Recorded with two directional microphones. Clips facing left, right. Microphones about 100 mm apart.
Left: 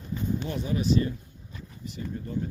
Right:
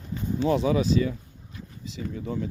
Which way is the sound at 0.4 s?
90° right.